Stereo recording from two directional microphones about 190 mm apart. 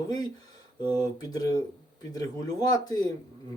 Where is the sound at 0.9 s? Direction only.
20° left (ahead or behind).